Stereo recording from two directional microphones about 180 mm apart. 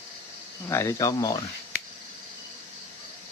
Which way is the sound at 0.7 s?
15° left (ahead or behind).